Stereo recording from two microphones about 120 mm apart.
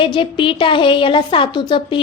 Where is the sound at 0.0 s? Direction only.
45° left (ahead or behind).